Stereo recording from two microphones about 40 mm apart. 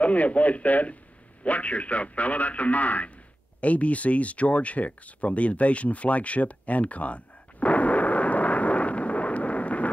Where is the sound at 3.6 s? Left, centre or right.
Left.